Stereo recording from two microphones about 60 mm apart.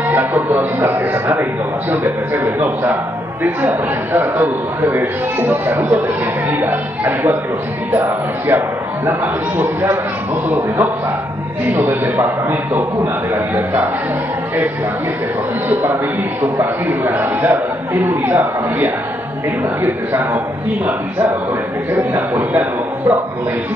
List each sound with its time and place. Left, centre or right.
0.1 s music: right
1.9 s speech: right
11.6 s speech: right
15.7 s speech: right
21.9 s a man's voice: right